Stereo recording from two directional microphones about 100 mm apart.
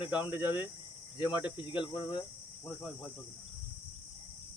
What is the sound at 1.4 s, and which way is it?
Speech, 55° left (ahead or behind).